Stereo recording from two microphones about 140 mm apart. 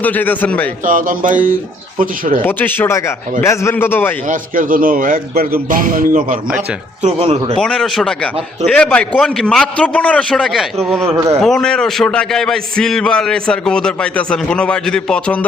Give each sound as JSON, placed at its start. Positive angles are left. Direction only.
{"t": 0.0, "sound": "a man's voice", "side_deg": 10}
{"t": 0.9, "sound": "music", "side_deg": -75}
{"t": 2.4, "sound": "a man's voice", "side_deg": 15}
{"t": 4.3, "sound": "a man's voice", "side_deg": -80}
{"t": 7.0, "sound": "speech", "side_deg": -45}
{"t": 7.5, "sound": "a man's voice", "side_deg": 5}